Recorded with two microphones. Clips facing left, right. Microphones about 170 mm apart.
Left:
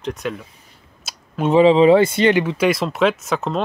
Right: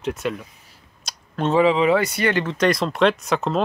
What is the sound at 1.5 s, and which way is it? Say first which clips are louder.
Speech: left 6 dB; 30° left (ahead or behind).